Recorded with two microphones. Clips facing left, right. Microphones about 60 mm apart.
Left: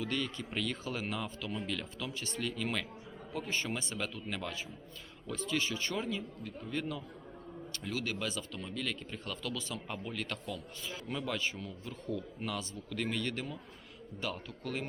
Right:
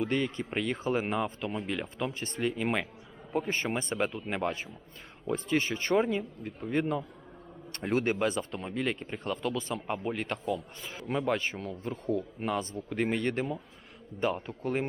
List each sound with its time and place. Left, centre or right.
0.0 s speech: right
7.7 s speech: right